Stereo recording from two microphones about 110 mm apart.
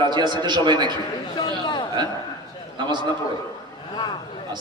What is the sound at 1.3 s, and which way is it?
Speech, 40° left (ahead or behind).